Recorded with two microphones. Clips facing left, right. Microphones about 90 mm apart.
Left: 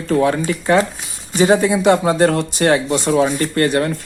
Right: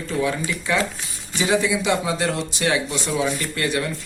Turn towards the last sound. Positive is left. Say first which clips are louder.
# left 8 dB
turn(degrees=50)  # may be behind; listen again after turning